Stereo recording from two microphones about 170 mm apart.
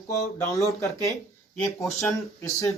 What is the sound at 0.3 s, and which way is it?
Speech, 15° left (ahead or behind).